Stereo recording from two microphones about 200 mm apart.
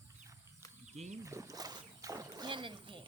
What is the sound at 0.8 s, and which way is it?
Speech, 35° right (ahead or behind).